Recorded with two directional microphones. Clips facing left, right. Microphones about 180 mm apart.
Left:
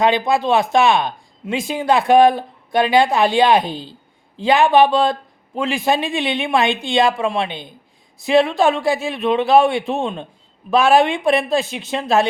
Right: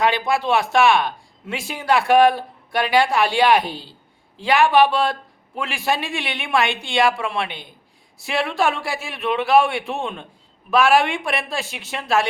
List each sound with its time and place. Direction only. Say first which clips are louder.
0.0 s speech: left 4 dB; 20° left (ahead or behind)